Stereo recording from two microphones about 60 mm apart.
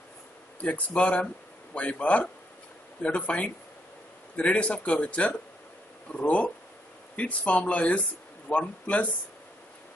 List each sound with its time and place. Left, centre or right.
0.6 s speech: left